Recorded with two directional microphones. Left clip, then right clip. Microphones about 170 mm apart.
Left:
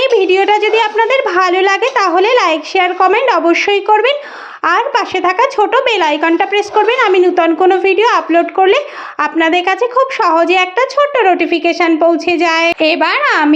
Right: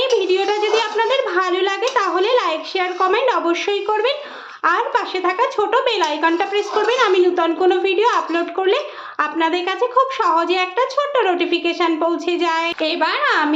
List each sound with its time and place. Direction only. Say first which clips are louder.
0.0 s speech: left 7 dB; 35° left (ahead or behind)